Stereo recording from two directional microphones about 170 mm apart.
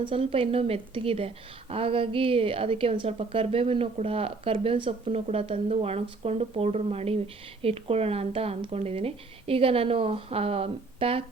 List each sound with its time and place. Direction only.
0.0 s speech: 30° right (ahead or behind)